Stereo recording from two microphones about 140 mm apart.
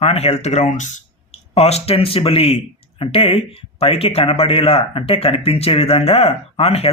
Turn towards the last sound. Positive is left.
turn(degrees=45)  # may be behind; listen again after turning